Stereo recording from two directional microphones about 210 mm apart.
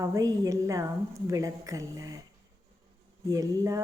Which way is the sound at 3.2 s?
15° right (ahead or behind).